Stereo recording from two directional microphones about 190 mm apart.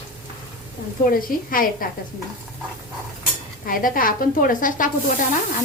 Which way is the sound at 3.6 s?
45° left (ahead or behind).